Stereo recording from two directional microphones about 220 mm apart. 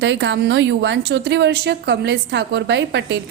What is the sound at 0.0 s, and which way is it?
A woman's voice, 55° right (ahead or behind).